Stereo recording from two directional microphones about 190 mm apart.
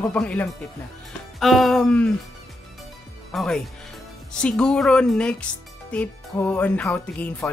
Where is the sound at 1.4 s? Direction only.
Centre (ahead or behind).